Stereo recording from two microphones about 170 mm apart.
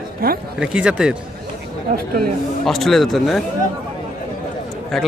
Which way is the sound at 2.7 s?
Centre (ahead or behind).